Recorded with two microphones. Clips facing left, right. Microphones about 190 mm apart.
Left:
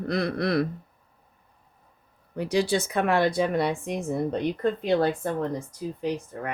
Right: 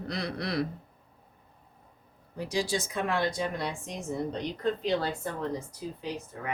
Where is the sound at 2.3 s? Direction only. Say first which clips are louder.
Left 6 dB; 65° left (ahead or behind).